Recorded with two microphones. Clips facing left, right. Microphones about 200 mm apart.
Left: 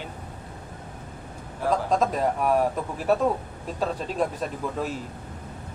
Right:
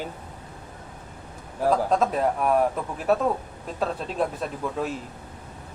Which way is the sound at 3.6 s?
Centre (ahead or behind).